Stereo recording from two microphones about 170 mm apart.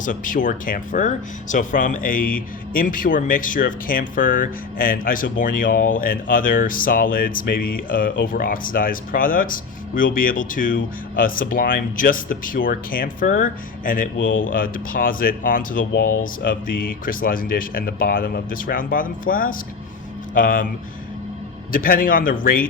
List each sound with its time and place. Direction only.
0.0 s speech: 50° left (ahead or behind)
21.7 s speech: 55° left (ahead or behind)